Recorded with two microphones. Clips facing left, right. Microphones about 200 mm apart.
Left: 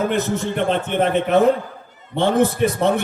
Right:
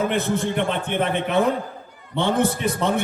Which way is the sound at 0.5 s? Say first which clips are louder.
Left 3 dB; 50° left (ahead or behind).